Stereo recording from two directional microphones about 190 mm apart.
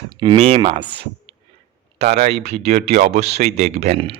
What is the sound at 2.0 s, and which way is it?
A man's voice, 35° right (ahead or behind).